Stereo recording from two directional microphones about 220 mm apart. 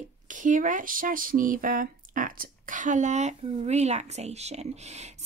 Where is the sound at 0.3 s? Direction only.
35° right (ahead or behind).